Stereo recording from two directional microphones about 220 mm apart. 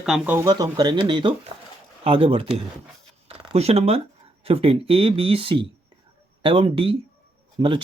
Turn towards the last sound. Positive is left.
turn(degrees=-20)  # may be behind; listen again after turning